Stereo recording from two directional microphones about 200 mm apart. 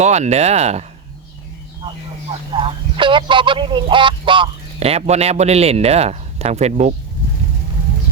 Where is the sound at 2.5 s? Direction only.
25° right (ahead or behind).